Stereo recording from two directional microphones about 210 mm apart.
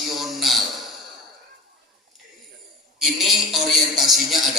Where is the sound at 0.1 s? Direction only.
Centre (ahead or behind).